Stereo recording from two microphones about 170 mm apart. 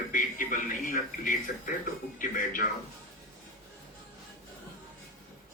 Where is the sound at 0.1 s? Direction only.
50° left (ahead or behind).